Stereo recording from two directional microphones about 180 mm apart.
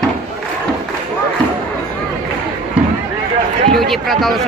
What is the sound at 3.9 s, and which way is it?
Speech, centre (ahead or behind).